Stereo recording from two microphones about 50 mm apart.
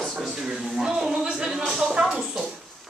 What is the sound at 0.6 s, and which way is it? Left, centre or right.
Music, centre.